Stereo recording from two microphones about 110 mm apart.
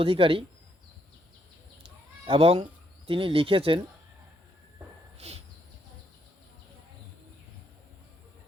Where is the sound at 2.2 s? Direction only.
55° right (ahead or behind).